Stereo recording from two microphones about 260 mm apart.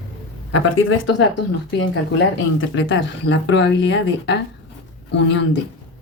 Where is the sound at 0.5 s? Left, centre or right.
Left.